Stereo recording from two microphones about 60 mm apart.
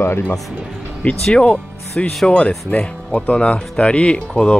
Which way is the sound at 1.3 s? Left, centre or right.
Centre.